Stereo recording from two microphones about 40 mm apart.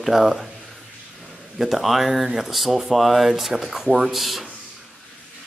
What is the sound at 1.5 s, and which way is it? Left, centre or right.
Speech, centre.